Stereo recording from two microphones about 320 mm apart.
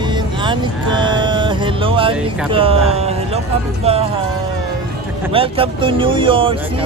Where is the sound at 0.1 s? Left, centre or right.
Centre.